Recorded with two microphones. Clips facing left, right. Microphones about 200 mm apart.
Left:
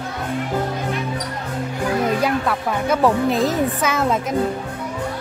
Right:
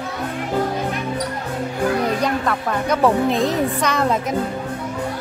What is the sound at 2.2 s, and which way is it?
Speech, 5° left (ahead or behind).